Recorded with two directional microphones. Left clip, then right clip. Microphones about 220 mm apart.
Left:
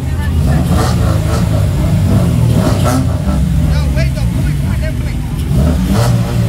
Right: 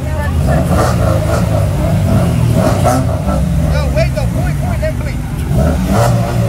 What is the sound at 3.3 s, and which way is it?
Vehicle, centre (ahead or behind).